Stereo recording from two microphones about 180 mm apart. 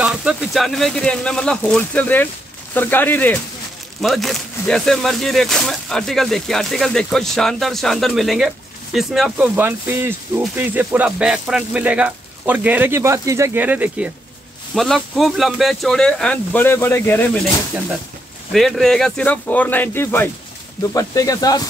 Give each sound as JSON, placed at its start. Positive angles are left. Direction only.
{"t": 0.0, "sound": "speech", "side_deg": -5}
{"t": 18.5, "sound": "speech", "side_deg": 0}